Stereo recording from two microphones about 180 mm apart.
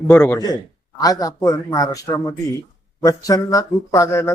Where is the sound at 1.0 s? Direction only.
20° left (ahead or behind).